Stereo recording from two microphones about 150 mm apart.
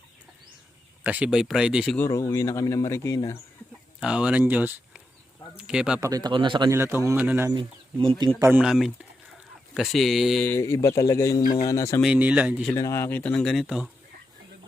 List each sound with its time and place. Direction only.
1.0 s speech: 10° right (ahead or behind)
2.0 s speech: 20° left (ahead or behind)
4.0 s speech: 5° right (ahead or behind)
6.0 s speech: 25° right (ahead or behind)
6.7 s speech: 15° right (ahead or behind)
7.5 s speech: 35° right (ahead or behind)
8.4 s speech: 15° right (ahead or behind)
8.6 s speech: centre (ahead or behind)
10.4 s speech: 15° left (ahead or behind)
12.0 s speech: 10° right (ahead or behind)
12.7 s speech: 20° left (ahead or behind); by 13.9 s centre (ahead or behind)